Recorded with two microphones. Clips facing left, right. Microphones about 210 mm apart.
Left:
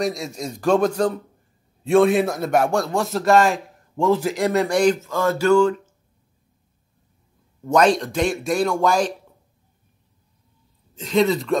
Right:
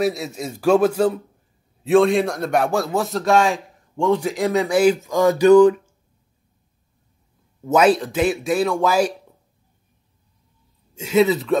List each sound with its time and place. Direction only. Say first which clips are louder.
0.0 s a man's voice: right 3 dB; 5° right (ahead or behind)
5.0 s a man's voice: right 5 dB; 15° right (ahead or behind)
7.6 s a man's voice: right 1 dB; 5° right (ahead or behind)
11.0 s a man's voice: right 2 dB; 5° right (ahead or behind)